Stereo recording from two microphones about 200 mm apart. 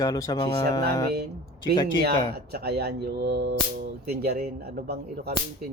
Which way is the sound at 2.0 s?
55° right (ahead or behind).